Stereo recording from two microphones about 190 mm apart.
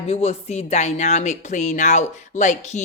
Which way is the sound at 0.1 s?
35° left (ahead or behind).